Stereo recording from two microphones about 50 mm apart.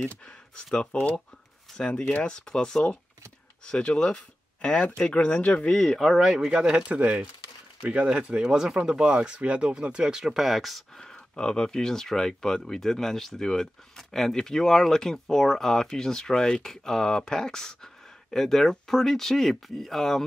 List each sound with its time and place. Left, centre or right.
0.6 s speech: centre
5.9 s speech: centre
6.4 s speech: centre
8.5 s speech: centre
11.0 s speech: centre